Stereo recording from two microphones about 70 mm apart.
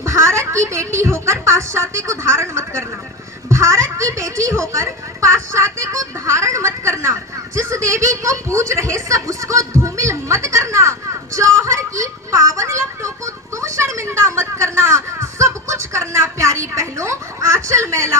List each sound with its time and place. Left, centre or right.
0.0 s a woman's voice: right